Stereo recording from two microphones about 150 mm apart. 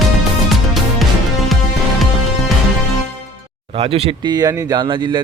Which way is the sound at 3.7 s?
40° right (ahead or behind).